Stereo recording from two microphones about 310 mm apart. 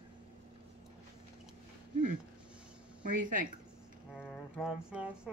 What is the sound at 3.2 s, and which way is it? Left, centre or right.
Speech, right.